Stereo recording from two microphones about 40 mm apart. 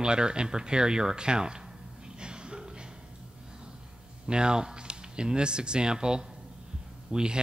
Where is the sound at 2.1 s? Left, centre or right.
Right.